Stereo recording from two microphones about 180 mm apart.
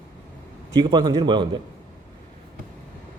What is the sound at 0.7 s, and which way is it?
Speech, 25° right (ahead or behind).